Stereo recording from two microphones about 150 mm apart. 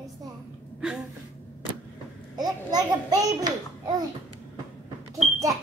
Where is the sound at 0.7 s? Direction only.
5° right (ahead or behind).